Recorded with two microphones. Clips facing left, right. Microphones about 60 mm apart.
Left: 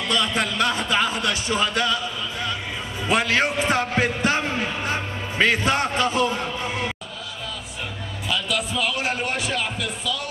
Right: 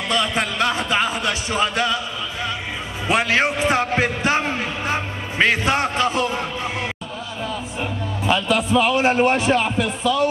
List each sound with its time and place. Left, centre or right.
0.1 s speech: right
3.1 s a man's voice: right
8.3 s a man's voice: right